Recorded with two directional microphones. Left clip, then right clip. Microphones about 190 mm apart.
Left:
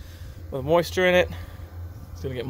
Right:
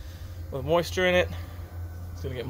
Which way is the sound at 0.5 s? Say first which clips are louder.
Left 4 dB; 60° left (ahead or behind).